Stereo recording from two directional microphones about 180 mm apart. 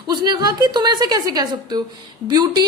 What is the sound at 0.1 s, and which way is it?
A woman's voice, 25° right (ahead or behind).